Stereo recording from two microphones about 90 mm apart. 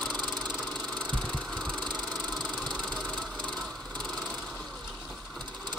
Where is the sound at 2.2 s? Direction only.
5° left (ahead or behind).